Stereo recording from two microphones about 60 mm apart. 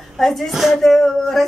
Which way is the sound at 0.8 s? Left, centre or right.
Centre.